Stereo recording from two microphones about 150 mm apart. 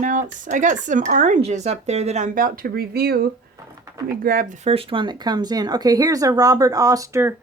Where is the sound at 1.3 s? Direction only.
45° right (ahead or behind); by 3.3 s 90° right.